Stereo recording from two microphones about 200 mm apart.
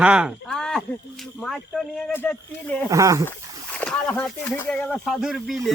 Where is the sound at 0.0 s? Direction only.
5° right (ahead or behind).